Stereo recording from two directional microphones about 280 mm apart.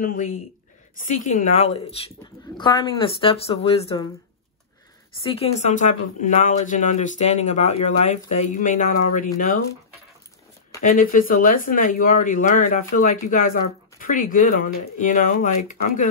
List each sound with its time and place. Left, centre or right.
0.0 s speech: left
5.2 s speech: left
10.8 s speech: left